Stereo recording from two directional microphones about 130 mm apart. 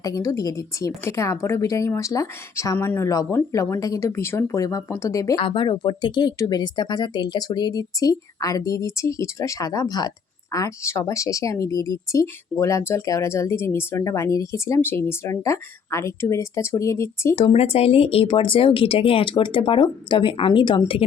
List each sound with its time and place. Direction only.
0.0 s a woman's voice: 25° left (ahead or behind)
5.4 s a woman's voice: 40° left (ahead or behind); by 17.3 s 20° left (ahead or behind)
17.3 s speech: 50° left (ahead or behind)